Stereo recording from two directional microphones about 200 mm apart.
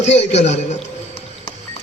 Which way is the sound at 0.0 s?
35° left (ahead or behind).